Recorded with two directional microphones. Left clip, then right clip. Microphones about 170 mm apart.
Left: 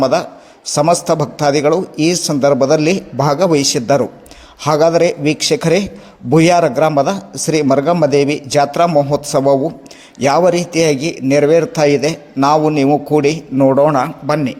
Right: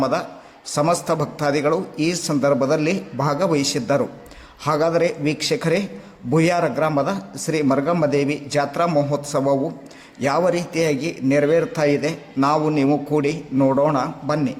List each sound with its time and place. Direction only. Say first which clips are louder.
0.0 s a man's voice: left 8 dB; 25° left (ahead or behind)